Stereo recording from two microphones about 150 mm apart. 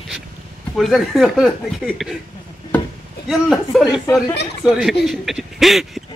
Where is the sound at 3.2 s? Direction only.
Centre (ahead or behind).